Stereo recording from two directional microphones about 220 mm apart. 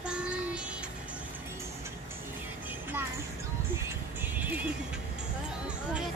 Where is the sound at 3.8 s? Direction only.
10° right (ahead or behind).